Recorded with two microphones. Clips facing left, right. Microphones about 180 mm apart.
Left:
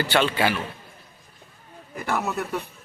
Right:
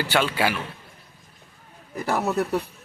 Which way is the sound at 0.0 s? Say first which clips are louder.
Left 1 dB; 10° right (ahead or behind).